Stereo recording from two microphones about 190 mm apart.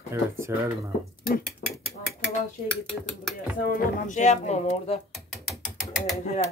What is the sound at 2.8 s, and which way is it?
Speech, centre (ahead or behind).